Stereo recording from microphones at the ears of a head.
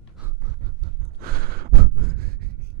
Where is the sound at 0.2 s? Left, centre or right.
Right.